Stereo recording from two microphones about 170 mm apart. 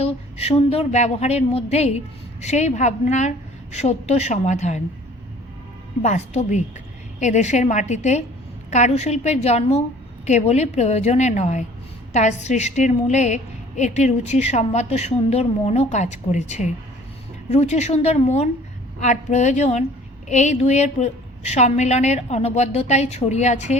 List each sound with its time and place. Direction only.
0.0 s a woman's voice: 35° left (ahead or behind)
6.0 s a woman's voice: 40° left (ahead or behind)